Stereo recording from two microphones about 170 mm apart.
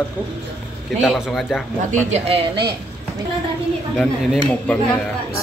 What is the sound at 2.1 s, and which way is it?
Speech, 35° right (ahead or behind).